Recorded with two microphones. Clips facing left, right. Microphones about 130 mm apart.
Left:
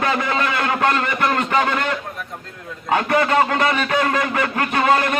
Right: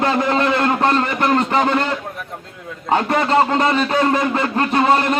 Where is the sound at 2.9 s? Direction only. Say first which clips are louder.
Right 1 dB; 30° right (ahead or behind).